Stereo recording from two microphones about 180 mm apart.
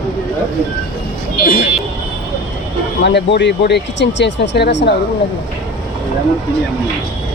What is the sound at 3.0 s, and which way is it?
Speech, 75° left (ahead or behind).